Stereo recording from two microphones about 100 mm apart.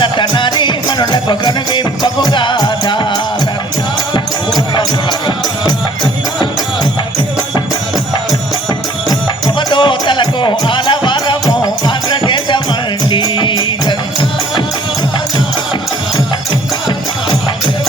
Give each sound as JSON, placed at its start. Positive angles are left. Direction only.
{"t": 0.0, "sound": "music", "side_deg": 55}
{"t": 9.6, "sound": "music", "side_deg": 50}